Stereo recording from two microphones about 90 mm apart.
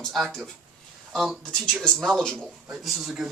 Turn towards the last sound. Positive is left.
turn(degrees=-5)  # may be behind; listen again after turning